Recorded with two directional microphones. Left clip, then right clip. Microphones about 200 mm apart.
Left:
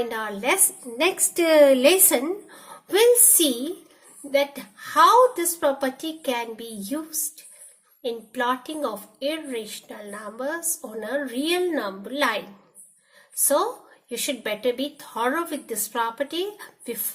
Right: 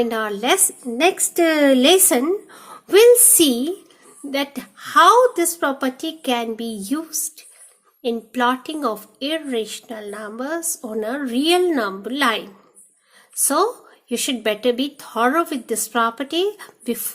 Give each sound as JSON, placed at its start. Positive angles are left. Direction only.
{"t": 0.1, "sound": "a woman's voice", "side_deg": -35}